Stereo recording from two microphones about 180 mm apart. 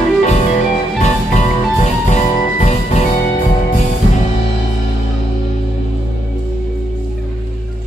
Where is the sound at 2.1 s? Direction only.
40° left (ahead or behind).